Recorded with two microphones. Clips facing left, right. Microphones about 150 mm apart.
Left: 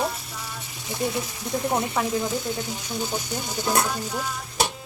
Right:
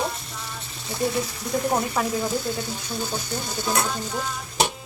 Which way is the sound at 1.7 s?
Centre (ahead or behind).